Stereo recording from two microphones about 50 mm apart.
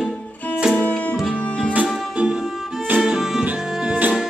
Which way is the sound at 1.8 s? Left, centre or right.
Centre.